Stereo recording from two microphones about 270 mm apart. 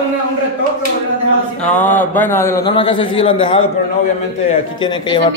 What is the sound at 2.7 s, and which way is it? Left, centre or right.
Speech, centre.